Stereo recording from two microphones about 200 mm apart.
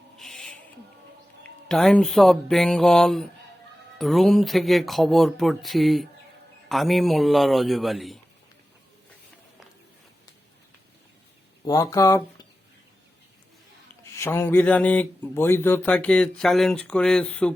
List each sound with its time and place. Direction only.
0.2 s owl: centre (ahead or behind)
1.6 s speech: centre (ahead or behind)
11.6 s speech: 15° left (ahead or behind)
14.0 s speech: 15° left (ahead or behind)